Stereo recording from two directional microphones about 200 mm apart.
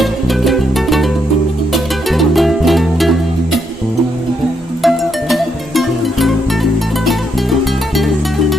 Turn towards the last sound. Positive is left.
turn(degrees=0)  # may be behind; listen again after turning